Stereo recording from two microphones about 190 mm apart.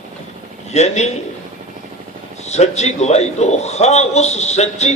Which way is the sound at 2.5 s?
35° left (ahead or behind).